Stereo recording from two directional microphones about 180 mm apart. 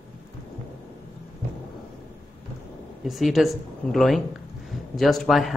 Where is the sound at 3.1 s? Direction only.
Centre (ahead or behind).